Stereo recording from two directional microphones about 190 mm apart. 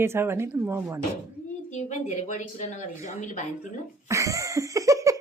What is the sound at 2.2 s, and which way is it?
Speech, 40° left (ahead or behind).